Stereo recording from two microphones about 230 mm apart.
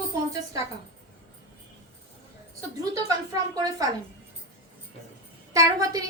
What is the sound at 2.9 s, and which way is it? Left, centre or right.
Speech, centre.